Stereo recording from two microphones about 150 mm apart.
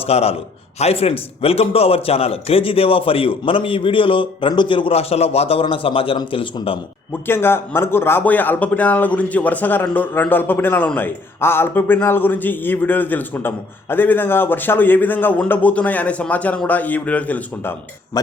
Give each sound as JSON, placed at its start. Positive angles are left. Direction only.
{"t": 0.0, "sound": "a man's voice", "side_deg": 45}
{"t": 7.1, "sound": "speech", "side_deg": 15}